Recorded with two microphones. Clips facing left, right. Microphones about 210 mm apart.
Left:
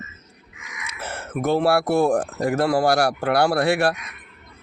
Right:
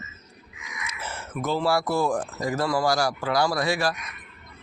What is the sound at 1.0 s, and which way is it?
Speech, 60° left (ahead or behind).